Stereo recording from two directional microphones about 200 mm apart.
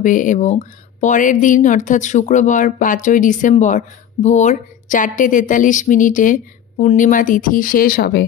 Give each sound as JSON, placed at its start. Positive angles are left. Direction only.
{"t": 0.0, "sound": "speech", "side_deg": 40}